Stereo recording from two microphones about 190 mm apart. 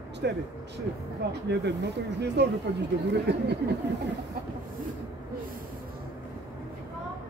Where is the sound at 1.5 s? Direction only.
65° right (ahead or behind).